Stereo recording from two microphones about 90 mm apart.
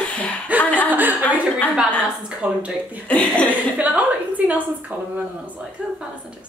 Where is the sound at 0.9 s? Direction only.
20° right (ahead or behind).